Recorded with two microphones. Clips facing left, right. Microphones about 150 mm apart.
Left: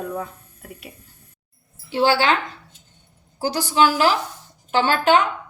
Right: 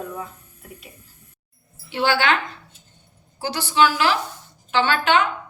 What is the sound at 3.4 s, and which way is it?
A woman's voice, 40° left (ahead or behind).